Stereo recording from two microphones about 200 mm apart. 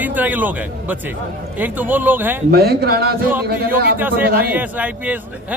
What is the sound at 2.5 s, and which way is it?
A man's voice, 50° right (ahead or behind).